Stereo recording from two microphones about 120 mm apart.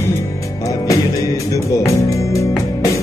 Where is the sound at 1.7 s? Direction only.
25° left (ahead or behind).